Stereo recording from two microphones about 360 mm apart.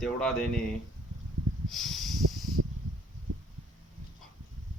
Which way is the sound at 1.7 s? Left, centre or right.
Centre.